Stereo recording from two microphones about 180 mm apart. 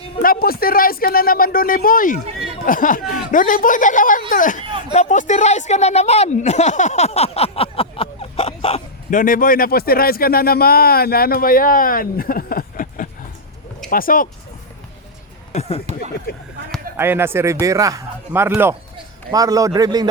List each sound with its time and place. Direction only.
0.2 s a sound: 55° left (ahead or behind)
2.6 s speech: 50° left (ahead or behind); by 8.8 s 30° left (ahead or behind)
9.0 s speech: 50° left (ahead or behind)
15.9 s speech: 40° right (ahead or behind)
16.3 s speech: 60° left (ahead or behind)
17.0 s speech: 15° right (ahead or behind)